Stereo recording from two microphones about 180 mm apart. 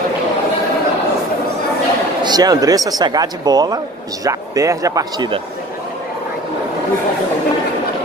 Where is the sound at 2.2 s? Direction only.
20° right (ahead or behind).